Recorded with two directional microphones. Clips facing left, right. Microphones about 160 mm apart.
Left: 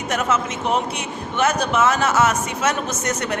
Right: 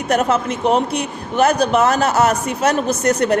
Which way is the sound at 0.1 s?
35° right (ahead or behind).